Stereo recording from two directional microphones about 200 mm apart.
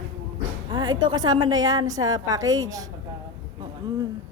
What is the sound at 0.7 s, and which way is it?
A woman's voice, 20° right (ahead or behind).